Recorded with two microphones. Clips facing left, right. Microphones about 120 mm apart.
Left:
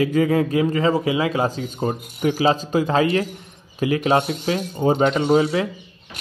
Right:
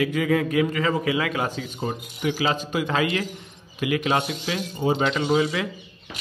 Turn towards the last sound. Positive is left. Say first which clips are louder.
# left 5 dB
turn(degrees=50)  # may be behind; listen again after turning